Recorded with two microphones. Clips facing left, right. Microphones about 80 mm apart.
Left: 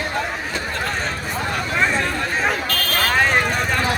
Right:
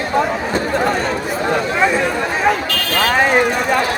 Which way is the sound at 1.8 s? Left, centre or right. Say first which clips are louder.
Right 1 dB; centre.